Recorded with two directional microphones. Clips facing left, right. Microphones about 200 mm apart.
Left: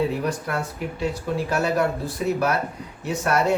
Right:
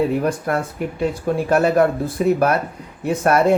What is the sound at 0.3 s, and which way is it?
Speech, 55° right (ahead or behind).